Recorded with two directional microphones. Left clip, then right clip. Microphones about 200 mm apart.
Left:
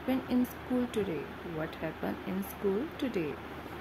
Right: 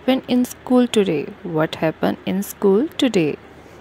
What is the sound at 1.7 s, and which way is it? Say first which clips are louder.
Speech: right 16 dB; 50° right (ahead or behind).